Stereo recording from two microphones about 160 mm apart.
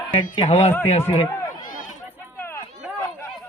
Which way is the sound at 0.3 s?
40° left (ahead or behind).